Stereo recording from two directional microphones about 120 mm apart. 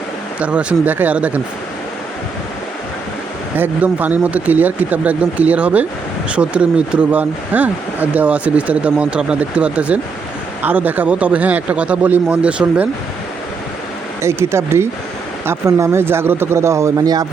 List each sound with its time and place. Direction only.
0.3 s speech: 10° right (ahead or behind)
3.6 s speech: 15° right (ahead or behind)
14.2 s speech: 20° right (ahead or behind)